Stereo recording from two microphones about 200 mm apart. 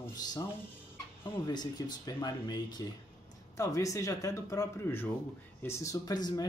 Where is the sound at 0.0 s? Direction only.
20° left (ahead or behind).